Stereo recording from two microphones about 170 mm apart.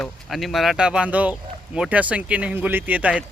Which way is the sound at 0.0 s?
Centre (ahead or behind).